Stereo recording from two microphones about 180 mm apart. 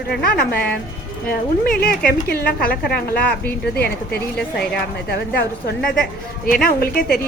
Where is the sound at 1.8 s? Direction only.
55° left (ahead or behind).